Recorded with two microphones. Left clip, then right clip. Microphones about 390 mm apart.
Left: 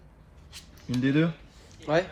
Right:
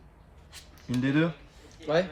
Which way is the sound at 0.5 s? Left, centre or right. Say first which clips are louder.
Even; centre.